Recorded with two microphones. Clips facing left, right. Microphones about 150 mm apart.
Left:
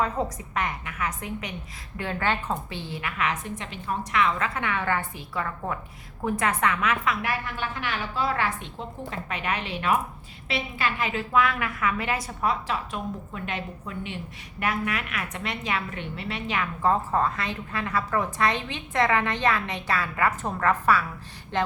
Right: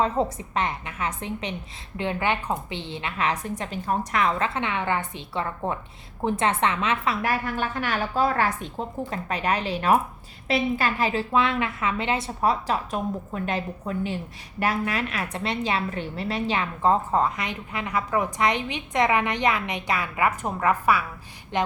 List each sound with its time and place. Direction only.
0.0 s a woman's voice: 25° right (ahead or behind)